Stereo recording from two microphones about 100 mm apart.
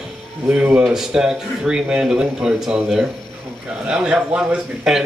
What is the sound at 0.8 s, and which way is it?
A man's voice, 5° right (ahead or behind).